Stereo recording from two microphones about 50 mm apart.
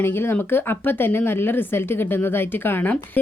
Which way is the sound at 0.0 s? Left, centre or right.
Left.